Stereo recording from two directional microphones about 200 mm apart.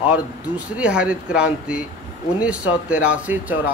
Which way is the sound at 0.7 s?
5° right (ahead or behind).